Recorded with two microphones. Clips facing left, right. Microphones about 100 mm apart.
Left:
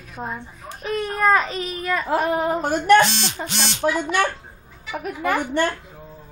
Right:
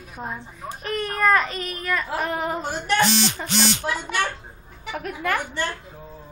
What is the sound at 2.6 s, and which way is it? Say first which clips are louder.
Speech: left 11 dB; 50° left (ahead or behind).